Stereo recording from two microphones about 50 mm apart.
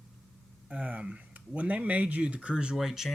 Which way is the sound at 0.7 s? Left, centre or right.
Right.